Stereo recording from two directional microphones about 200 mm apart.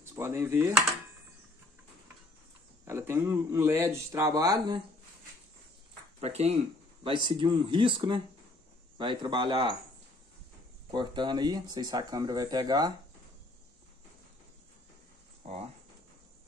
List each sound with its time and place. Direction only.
0.0 s speech: 15° right (ahead or behind)
2.8 s a man's voice: 10° right (ahead or behind)
6.2 s speech: 30° right (ahead or behind)
10.9 s speech: 20° right (ahead or behind)
15.4 s a sound: 30° right (ahead or behind)